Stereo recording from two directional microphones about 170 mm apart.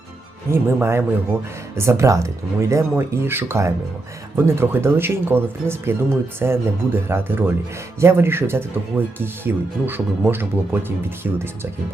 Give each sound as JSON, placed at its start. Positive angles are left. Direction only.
{"t": 0.5, "sound": "speech", "side_deg": -15}